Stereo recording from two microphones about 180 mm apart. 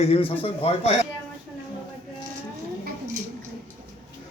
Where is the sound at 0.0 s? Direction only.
30° left (ahead or behind).